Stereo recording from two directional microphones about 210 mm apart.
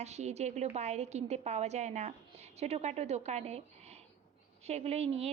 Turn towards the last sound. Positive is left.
turn(degrees=-30)  # may be behind; listen again after turning